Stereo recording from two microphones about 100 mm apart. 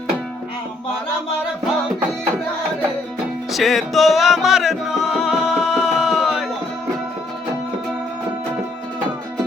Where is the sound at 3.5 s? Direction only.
Centre (ahead or behind).